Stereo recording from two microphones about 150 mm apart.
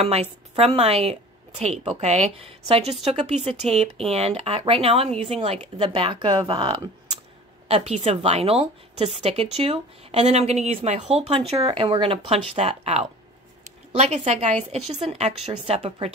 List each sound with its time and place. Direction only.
0.0 s a woman's voice: 45° right (ahead or behind); by 6.9 s 30° right (ahead or behind)
7.6 s a woman's voice: 45° right (ahead or behind)